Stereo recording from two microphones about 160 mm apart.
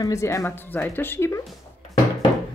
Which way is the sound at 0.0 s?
20° left (ahead or behind).